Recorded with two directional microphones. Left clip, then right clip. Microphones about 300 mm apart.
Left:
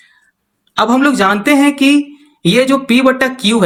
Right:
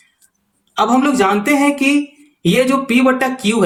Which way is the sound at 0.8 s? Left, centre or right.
Left.